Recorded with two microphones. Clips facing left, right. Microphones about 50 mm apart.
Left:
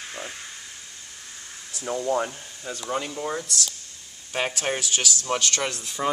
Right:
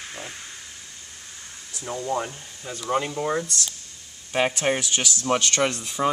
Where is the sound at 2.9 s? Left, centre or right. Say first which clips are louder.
Right 4 dB; centre.